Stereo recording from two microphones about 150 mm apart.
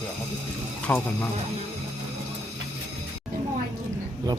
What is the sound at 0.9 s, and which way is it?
Speech, 10° left (ahead or behind).